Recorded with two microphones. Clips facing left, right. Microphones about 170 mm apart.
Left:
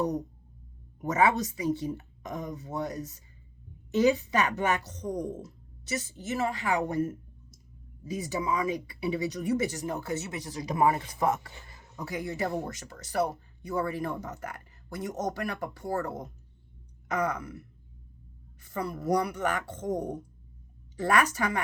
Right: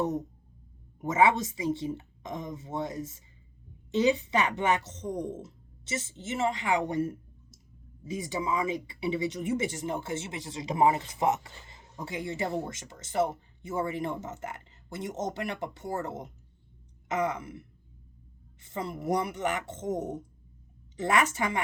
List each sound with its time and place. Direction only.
1.0 s speech: 25° right (ahead or behind)
8.0 s speech: 25° right (ahead or behind)